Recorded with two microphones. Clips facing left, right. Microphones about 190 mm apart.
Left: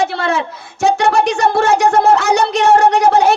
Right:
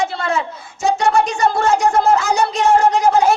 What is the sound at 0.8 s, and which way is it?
Speech, 75° left (ahead or behind).